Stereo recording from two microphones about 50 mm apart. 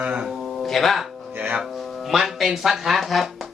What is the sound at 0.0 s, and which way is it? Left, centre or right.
Speech, right.